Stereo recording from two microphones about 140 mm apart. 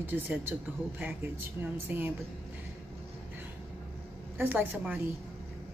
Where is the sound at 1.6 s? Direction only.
15° right (ahead or behind).